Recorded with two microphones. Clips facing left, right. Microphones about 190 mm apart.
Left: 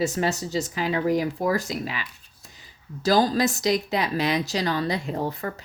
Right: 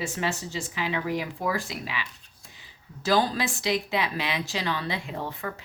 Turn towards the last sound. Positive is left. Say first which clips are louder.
# left 6 dB
turn(degrees=40)  # may be behind; listen again after turning